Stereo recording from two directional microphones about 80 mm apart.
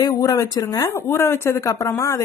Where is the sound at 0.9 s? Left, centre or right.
Left.